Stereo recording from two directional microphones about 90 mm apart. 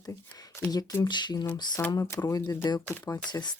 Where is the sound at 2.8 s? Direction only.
30° left (ahead or behind).